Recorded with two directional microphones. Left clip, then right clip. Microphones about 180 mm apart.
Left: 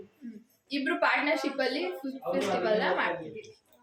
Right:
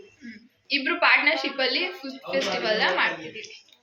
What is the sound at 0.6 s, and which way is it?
A woman's voice, 15° left (ahead or behind).